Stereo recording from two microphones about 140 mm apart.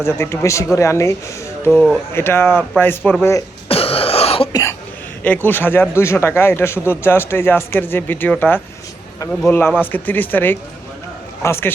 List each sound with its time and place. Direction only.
0.0 s speech: 20° left (ahead or behind)
1.7 s speech: centre (ahead or behind)
2.1 s speech: 15° left (ahead or behind)
3.7 s cough: 45° left (ahead or behind)
5.2 s speech: 15° left (ahead or behind)